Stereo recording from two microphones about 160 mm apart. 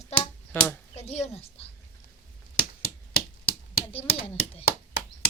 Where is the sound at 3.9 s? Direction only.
35° left (ahead or behind).